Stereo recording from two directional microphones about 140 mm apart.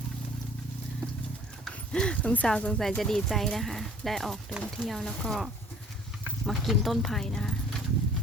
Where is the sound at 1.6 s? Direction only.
5° left (ahead or behind).